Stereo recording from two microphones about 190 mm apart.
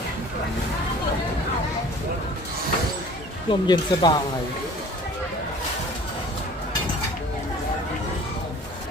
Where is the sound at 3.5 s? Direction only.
25° left (ahead or behind).